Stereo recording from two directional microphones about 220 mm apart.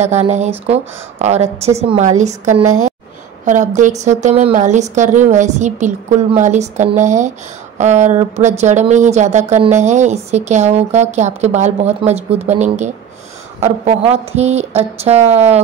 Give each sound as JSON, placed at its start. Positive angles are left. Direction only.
{"t": 0.0, "sound": "a woman's voice", "side_deg": -30}
{"t": 2.6, "sound": "a woman's voice", "side_deg": -75}
{"t": 3.4, "sound": "a woman's voice", "side_deg": -35}